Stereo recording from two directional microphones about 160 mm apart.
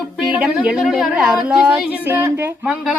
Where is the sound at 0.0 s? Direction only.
5° right (ahead or behind).